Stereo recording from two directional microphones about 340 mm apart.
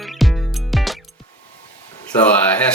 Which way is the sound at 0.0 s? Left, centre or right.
Centre.